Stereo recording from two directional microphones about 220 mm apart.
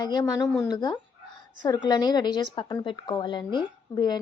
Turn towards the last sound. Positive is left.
turn(degrees=20)  # may be behind; listen again after turning